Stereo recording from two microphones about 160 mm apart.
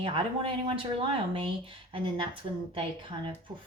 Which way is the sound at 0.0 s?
35° right (ahead or behind).